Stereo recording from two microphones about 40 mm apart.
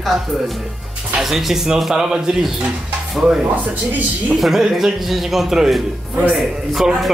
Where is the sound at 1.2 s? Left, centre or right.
Centre.